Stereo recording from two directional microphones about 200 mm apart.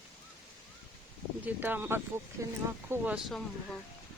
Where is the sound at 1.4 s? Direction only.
10° right (ahead or behind).